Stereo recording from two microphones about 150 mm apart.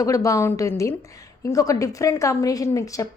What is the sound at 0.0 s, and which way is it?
A woman's voice, 20° left (ahead or behind).